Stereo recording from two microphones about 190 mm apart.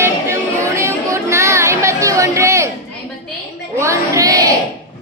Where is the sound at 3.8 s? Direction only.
15° right (ahead or behind).